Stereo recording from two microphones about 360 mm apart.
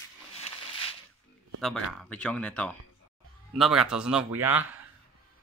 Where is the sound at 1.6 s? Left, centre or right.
Centre.